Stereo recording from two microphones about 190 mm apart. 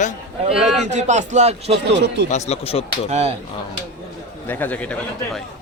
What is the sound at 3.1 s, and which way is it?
Speech, 35° right (ahead or behind).